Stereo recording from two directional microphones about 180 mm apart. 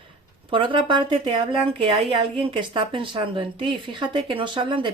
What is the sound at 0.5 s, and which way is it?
Speech, 30° right (ahead or behind).